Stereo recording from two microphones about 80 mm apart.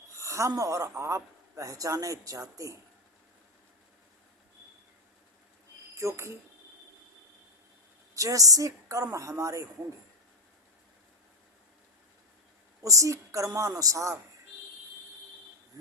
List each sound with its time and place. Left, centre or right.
0.2 s a man's voice: right
6.0 s speech: right
8.1 s a woman's voice: right
12.8 s a man's voice: right